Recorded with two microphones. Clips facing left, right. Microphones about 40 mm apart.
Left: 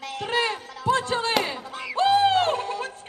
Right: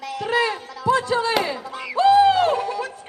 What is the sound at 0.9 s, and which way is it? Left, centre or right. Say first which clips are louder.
Speech: right 4 dB; left.